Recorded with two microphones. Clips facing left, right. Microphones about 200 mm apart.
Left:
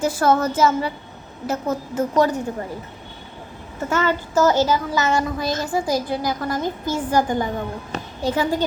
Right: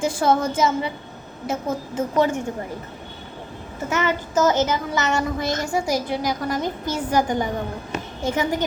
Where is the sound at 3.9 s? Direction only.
10° right (ahead or behind).